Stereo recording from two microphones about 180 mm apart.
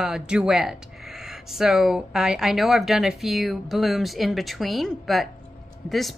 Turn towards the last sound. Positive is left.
turn(degrees=0)  # may be behind; listen again after turning